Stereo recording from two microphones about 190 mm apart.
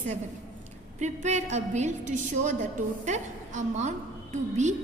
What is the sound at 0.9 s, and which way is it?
A woman's voice, 40° right (ahead or behind).